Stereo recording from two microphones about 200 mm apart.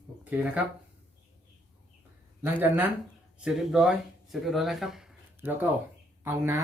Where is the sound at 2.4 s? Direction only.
10° right (ahead or behind).